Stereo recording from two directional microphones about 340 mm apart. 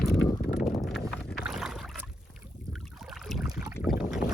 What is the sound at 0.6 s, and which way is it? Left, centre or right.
Boat, centre.